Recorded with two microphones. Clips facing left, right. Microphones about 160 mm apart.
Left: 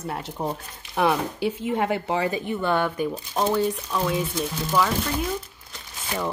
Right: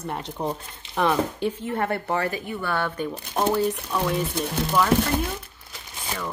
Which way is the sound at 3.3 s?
Centre (ahead or behind).